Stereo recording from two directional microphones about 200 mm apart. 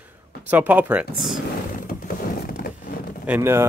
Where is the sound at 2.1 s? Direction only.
45° left (ahead or behind).